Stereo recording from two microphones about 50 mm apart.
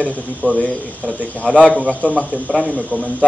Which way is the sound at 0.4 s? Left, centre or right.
Left.